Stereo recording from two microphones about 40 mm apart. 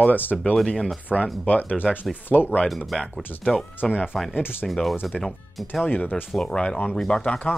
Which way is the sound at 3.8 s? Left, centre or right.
Left.